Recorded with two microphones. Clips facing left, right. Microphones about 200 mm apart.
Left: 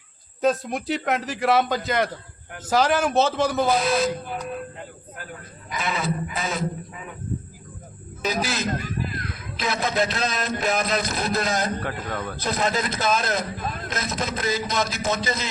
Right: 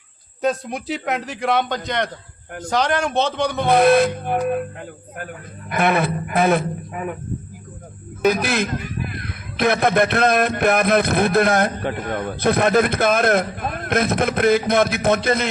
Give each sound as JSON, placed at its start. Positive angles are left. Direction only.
{"t": 0.4, "sound": "a man's voice", "side_deg": 0}
{"t": 3.7, "sound": "music", "side_deg": -60}
{"t": 5.1, "sound": "a man's voice", "side_deg": -60}
{"t": 8.2, "sound": "a man's voice", "side_deg": -60}
{"t": 12.1, "sound": "a man's voice", "side_deg": -20}
{"t": 12.4, "sound": "a man's voice", "side_deg": -60}